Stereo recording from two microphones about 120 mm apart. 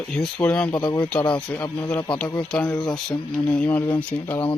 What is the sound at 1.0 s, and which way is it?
Speech, 10° left (ahead or behind).